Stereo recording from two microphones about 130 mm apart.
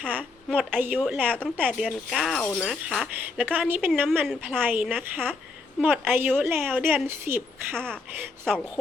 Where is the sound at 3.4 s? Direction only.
15° right (ahead or behind).